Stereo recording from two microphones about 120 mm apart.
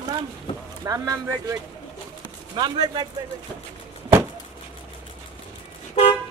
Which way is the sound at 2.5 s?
40° right (ahead or behind).